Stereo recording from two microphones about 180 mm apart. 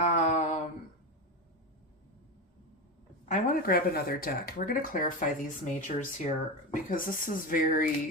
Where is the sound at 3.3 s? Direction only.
50° left (ahead or behind).